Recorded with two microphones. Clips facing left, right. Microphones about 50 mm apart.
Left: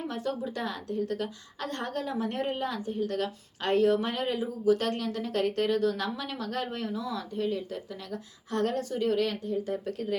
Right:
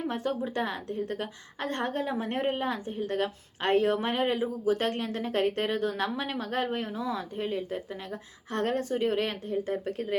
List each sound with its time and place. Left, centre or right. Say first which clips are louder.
0.1 s a woman's voice: right 2 dB; right